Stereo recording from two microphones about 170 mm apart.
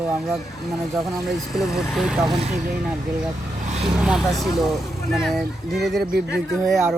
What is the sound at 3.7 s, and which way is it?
Vehicle, 40° right (ahead or behind).